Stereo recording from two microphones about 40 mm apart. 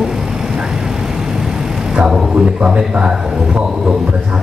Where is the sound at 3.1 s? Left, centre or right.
Centre.